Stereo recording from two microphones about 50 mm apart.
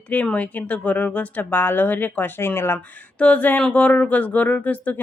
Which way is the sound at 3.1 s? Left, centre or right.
Left.